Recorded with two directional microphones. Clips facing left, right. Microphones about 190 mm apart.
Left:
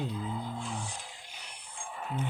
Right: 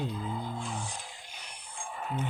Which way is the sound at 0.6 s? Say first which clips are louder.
Right 1 dB; 45° right (ahead or behind).